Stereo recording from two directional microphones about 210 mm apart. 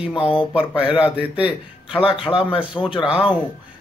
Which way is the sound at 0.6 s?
5° right (ahead or behind).